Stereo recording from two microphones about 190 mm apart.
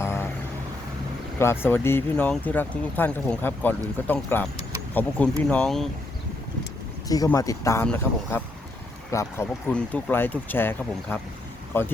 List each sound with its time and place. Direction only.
0.0 s a sound: 15° left (ahead or behind)
1.4 s speech: 15° left (ahead or behind)
7.1 s speech: 20° left (ahead or behind)